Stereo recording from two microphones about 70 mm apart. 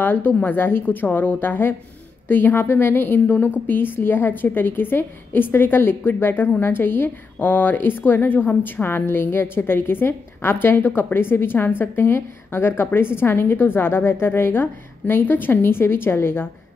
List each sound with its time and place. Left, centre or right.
0.0 s a woman's voice: left